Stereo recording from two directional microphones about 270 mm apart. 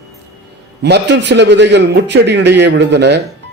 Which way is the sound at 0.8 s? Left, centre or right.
Right.